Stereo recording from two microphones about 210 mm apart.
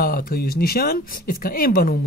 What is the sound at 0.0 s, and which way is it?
Speech, 45° left (ahead or behind).